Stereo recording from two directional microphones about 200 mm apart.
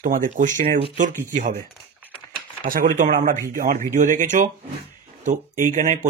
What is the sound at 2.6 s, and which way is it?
Speech, 40° right (ahead or behind).